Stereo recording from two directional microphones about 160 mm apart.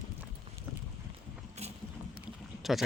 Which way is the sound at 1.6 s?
40° right (ahead or behind).